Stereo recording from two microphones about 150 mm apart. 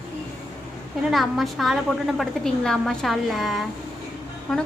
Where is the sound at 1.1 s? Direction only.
Centre (ahead or behind).